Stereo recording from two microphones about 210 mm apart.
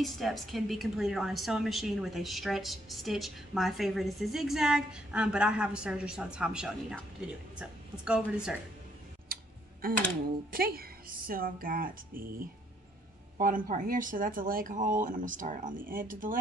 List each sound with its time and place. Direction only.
0.0 s a woman's voice: centre (ahead or behind)
9.3 s tick-tock: 45° right (ahead or behind)
10.5 s speech: 45° right (ahead or behind)
13.7 s speech: 40° right (ahead or behind)